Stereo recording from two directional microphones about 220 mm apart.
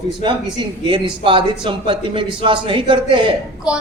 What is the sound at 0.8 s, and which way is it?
Speech, 20° right (ahead or behind).